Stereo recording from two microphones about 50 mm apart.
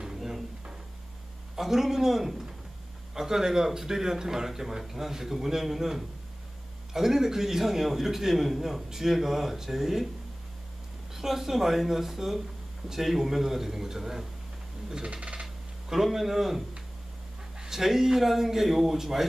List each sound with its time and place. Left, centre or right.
0.0 s drawer open or close: centre
1.5 s a man's voice: centre
11.1 s a man's voice: centre
15.0 s speech: right
15.4 s a sound: centre
17.6 s a man's voice: centre